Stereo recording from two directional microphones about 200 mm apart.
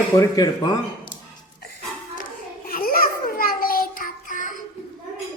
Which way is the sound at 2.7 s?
45° left (ahead or behind).